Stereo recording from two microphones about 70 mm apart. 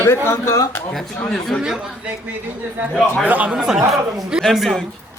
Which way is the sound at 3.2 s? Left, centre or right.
Right.